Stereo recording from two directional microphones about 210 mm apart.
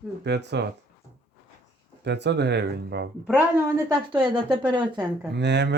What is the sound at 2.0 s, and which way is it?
Speech, 55° right (ahead or behind).